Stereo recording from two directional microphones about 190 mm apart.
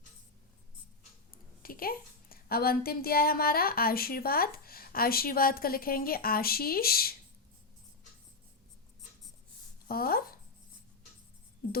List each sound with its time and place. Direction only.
1.3 s a woman's voice: 50° left (ahead or behind)
9.9 s speech: 50° left (ahead or behind)
11.6 s music: 50° left (ahead or behind)